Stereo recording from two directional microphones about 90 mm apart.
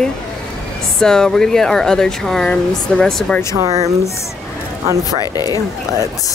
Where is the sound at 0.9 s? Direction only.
5° left (ahead or behind).